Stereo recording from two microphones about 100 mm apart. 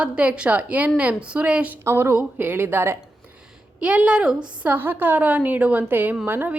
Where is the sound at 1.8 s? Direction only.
25° right (ahead or behind).